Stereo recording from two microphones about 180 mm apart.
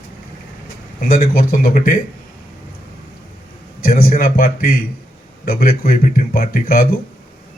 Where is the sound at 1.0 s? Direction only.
50° left (ahead or behind).